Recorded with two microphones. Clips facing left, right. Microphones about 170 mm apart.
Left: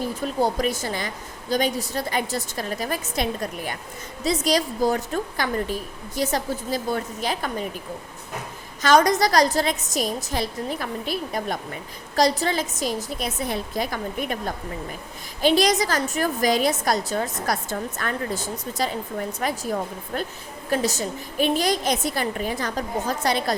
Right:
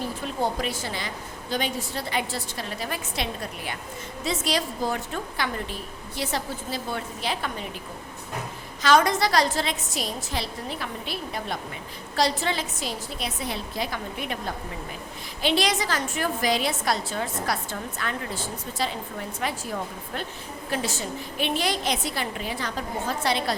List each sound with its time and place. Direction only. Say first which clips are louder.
0.4 s a woman's voice: left 3 dB; 45° left (ahead or behind)
8.8 s a woman's voice: left 3 dB; 45° left (ahead or behind)
15.4 s a woman's voice: left 5 dB; 45° left (ahead or behind)
20.1 s a woman's voice: left 4 dB; 45° left (ahead or behind)